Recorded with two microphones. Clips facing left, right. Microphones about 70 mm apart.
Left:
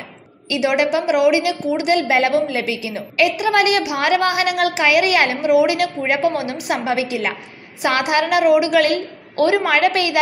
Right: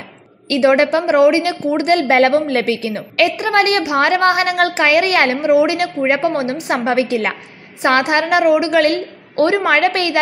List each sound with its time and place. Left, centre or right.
0.5 s a woman's voice: right